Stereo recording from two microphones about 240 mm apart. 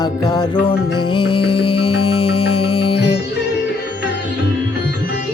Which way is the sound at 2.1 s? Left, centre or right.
Left.